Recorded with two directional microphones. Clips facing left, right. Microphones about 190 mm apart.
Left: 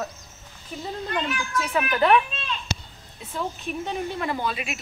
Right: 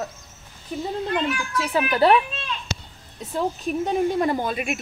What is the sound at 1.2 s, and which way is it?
Speech, 10° right (ahead or behind).